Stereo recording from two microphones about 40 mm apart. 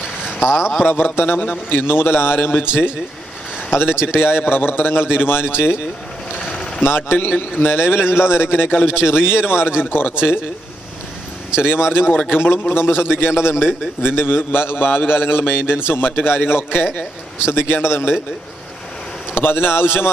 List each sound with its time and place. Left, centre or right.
0.0 s a sound: centre
0.9 s a man's voice: left
3.7 s a man's voice: left
4.2 s a man's voice: left
6.5 s vehicle: centre
6.8 s a man's voice: left
9.8 s a man's voice: left
11.6 s a man's voice: left
14.0 s a man's voice: left
17.5 s a man's voice: left
19.3 s a man's voice: left